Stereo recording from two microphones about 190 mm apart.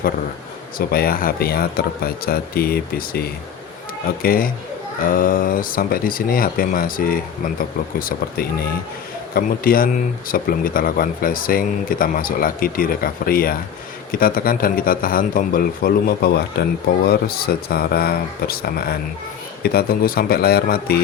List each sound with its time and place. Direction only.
0.8 s a man's voice: 50° left (ahead or behind)